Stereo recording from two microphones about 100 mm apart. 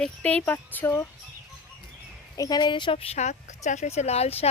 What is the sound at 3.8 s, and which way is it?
Speech, 90° left.